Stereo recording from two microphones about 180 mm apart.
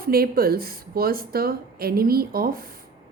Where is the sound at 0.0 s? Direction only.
55° right (ahead or behind).